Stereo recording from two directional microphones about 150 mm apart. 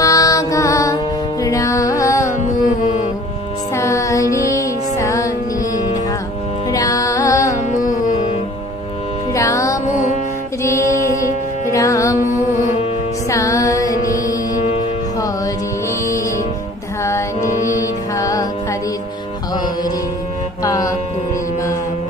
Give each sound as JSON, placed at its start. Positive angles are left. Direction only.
{"t": 0.0, "sound": "music", "side_deg": 20}
{"t": 3.7, "sound": "music", "side_deg": 20}
{"t": 9.3, "sound": "music", "side_deg": 20}